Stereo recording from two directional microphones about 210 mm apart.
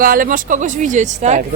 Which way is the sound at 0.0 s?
40° right (ahead or behind).